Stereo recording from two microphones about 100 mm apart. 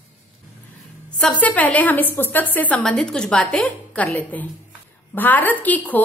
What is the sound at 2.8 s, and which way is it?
A woman's voice, 5° left (ahead or behind).